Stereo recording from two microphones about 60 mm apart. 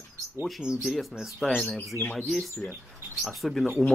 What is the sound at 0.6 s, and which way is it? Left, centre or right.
Speech, centre.